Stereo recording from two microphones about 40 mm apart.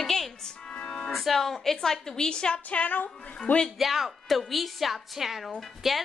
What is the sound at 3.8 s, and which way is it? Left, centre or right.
A woman's voice, centre.